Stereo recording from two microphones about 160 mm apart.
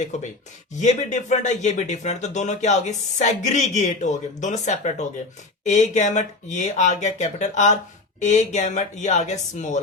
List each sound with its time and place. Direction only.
0.1 s speech: 45° left (ahead or behind)